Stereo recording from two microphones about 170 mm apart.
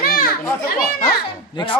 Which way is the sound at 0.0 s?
60° left (ahead or behind).